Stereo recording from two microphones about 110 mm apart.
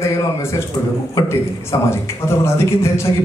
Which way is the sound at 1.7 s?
25° left (ahead or behind).